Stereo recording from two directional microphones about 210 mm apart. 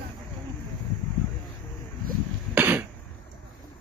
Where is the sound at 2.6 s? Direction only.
10° right (ahead or behind).